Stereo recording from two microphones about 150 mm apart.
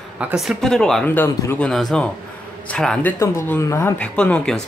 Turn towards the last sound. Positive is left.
turn(degrees=5)  # may be behind; listen again after turning